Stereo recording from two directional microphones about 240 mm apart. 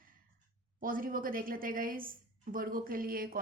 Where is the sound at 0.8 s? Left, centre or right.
Right.